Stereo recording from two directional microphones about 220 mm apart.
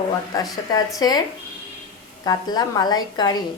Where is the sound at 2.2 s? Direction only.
15° left (ahead or behind).